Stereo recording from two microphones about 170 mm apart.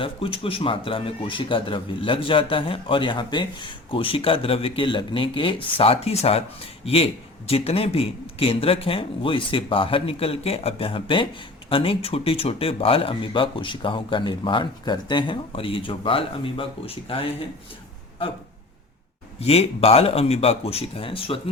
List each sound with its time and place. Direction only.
0.0 s a man's voice: 30° left (ahead or behind)
19.4 s a man's voice: 35° left (ahead or behind)